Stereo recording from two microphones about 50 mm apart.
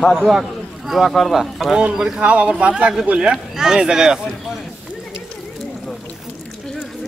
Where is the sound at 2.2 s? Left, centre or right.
Right.